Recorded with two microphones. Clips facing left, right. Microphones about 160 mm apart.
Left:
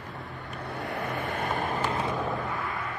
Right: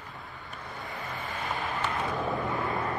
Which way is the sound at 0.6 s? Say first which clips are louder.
Left 7 dB; 70° left (ahead or behind).